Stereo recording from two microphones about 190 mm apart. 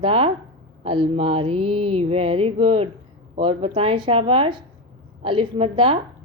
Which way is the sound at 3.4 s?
30° right (ahead or behind).